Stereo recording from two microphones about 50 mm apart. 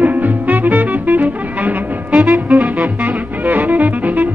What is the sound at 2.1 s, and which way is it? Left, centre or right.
Music, centre.